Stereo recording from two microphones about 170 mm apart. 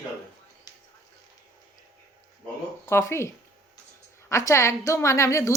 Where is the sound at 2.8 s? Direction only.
15° left (ahead or behind).